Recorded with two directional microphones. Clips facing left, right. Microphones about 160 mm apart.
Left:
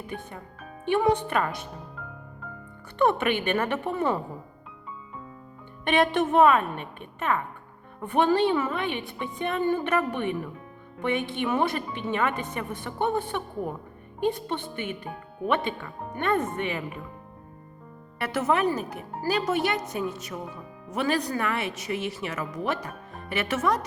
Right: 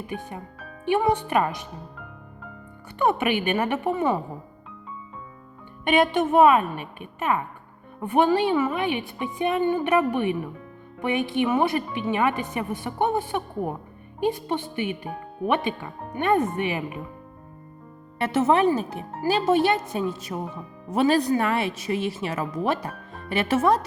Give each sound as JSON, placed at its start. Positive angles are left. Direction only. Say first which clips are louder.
{"t": 0.1, "sound": "speech", "louder": "right 4 dB", "side_deg": -15}
{"t": 3.0, "sound": "speech", "louder": "right 1 dB", "side_deg": -10}
{"t": 5.8, "sound": "speech", "louder": "right 2 dB", "side_deg": -5}
{"t": 18.2, "sound": "speech", "louder": "right 5 dB", "side_deg": -25}